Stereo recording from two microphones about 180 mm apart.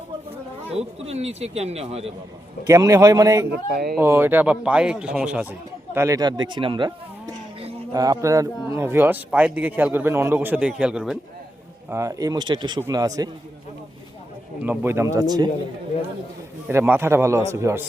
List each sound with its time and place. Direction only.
0.7 s a man's voice: 35° right (ahead or behind)
2.6 s a man's voice: 15° right (ahead or behind)
3.5 s speech: 60° right (ahead or behind)
4.0 s a man's voice: 10° right (ahead or behind); by 6.9 s 30° right (ahead or behind)
7.9 s a man's voice: 20° right (ahead or behind); by 11.2 s 5° right (ahead or behind)
11.9 s speech: 15° right (ahead or behind)
14.6 s a man's voice: 10° right (ahead or behind)
16.6 s a man's voice: 10° right (ahead or behind)